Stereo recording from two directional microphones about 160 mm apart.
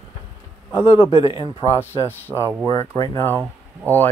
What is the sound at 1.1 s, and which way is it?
Speech, 35° left (ahead or behind).